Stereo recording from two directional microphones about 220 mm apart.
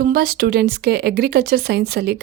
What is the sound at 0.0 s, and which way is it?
Speech, 45° right (ahead or behind).